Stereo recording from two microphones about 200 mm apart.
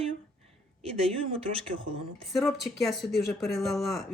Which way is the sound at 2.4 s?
Centre (ahead or behind).